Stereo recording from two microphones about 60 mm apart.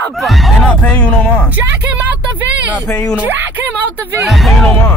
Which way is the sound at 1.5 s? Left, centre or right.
Right.